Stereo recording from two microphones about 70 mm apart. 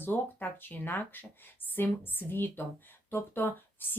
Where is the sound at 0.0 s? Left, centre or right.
Left.